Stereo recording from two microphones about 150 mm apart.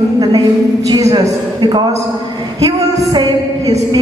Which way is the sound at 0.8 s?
25° right (ahead or behind).